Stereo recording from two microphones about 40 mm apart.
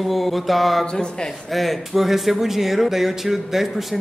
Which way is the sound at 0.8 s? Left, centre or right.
Left.